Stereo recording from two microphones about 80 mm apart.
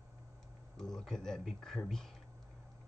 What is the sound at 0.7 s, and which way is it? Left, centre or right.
Speech, centre.